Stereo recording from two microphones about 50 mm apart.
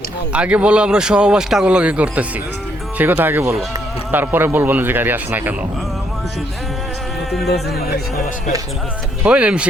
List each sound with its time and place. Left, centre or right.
0.3 s speech: right
1.6 s speech: right
3.0 s speech: right
9.2 s speech: right